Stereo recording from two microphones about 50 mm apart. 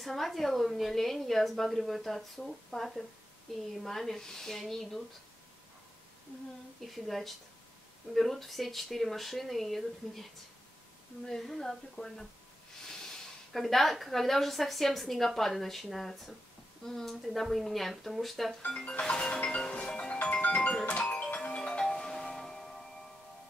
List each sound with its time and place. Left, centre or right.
0.0 s a woman's voice: centre
6.8 s a woman's voice: centre
11.2 s a woman's voice: centre
18.8 s music: centre
21.8 s tubular bells: centre